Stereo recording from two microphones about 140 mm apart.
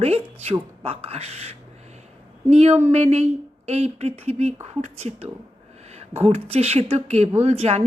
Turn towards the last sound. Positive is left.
turn(degrees=-50)  # may be behind; listen again after turning